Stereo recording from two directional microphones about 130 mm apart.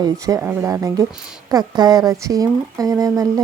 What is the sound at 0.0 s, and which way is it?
Speech, 25° right (ahead or behind).